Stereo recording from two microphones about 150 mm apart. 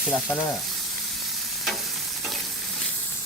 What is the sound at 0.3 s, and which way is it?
Sizzle, 5° left (ahead or behind).